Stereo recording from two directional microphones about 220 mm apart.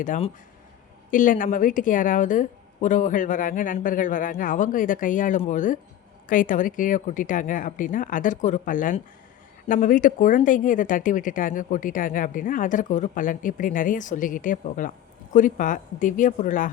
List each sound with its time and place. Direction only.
0.0 s speech: 35° left (ahead or behind)